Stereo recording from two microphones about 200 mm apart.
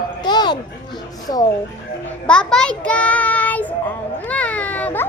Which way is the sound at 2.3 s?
5° left (ahead or behind).